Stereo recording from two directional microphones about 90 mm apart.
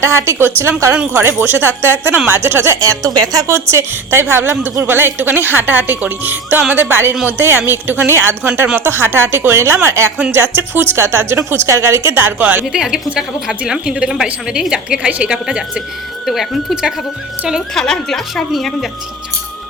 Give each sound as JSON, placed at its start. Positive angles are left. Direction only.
{"t": 0.0, "sound": "a woman's voice", "side_deg": -30}
{"t": 2.8, "sound": "speech", "side_deg": -40}
{"t": 3.4, "sound": "a woman's voice", "side_deg": -30}
{"t": 12.6, "sound": "a woman's voice", "side_deg": -5}